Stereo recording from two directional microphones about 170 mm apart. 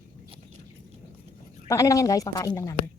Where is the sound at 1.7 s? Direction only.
20° left (ahead or behind).